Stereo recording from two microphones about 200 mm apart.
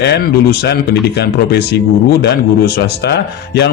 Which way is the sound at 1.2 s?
55° left (ahead or behind).